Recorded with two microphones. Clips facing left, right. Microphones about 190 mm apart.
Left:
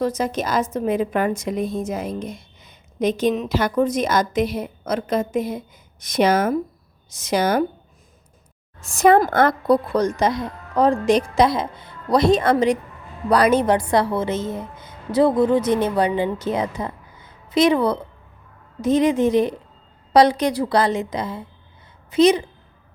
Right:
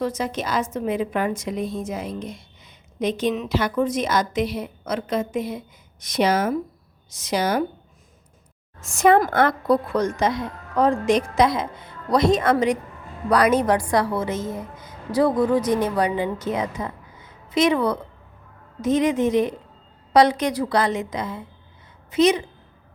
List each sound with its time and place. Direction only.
0.0 s a woman's voice: 40° left (ahead or behind)
8.8 s a woman's voice: 35° left (ahead or behind)